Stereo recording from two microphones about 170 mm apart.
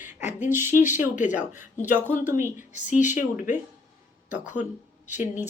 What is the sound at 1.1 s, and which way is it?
Speech, 45° left (ahead or behind).